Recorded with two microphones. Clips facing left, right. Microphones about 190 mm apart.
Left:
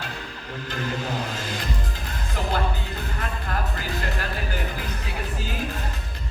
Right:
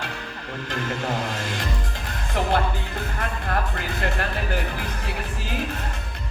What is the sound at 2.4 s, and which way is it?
Speech, 65° right (ahead or behind).